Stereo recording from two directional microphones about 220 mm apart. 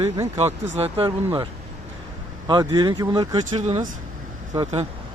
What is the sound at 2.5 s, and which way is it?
Speech, 20° right (ahead or behind).